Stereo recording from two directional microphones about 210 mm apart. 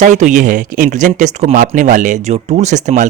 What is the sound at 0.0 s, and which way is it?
Speech, 35° right (ahead or behind).